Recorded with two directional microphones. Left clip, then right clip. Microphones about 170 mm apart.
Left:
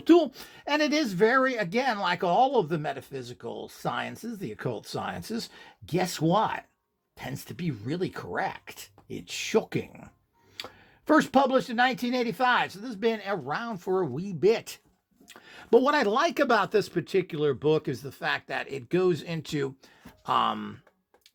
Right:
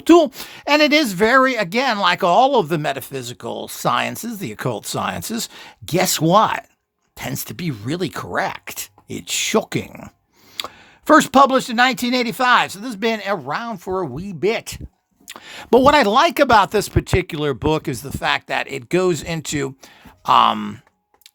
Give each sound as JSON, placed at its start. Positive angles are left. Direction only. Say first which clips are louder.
{"t": 0.0, "sound": "a woman's voice", "louder": "right 9 dB", "side_deg": -40}
{"t": 15.3, "sound": "speech", "louder": "right 7 dB", "side_deg": -40}